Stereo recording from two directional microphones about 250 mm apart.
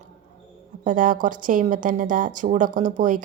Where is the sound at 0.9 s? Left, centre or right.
Right.